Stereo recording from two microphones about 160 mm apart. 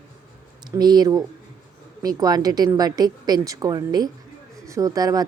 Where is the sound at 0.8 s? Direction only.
25° right (ahead or behind).